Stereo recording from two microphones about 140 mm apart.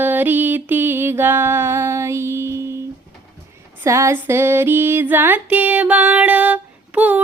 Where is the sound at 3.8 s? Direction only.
20° right (ahead or behind).